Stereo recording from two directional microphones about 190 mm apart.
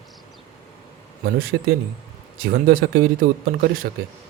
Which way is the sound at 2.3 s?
50° right (ahead or behind).